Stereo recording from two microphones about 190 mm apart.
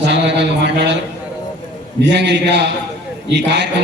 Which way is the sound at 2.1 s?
65° right (ahead or behind).